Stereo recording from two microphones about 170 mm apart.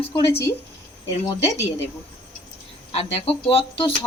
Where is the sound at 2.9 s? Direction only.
35° left (ahead or behind).